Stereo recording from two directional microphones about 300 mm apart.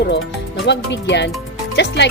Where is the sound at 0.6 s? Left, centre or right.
Left.